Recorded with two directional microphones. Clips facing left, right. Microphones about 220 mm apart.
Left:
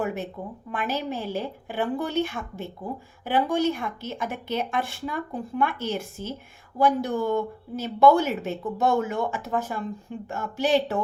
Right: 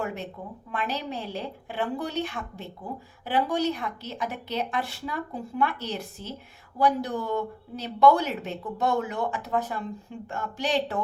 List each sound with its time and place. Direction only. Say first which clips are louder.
0.0 s speech: left 4 dB; 5° left (ahead or behind)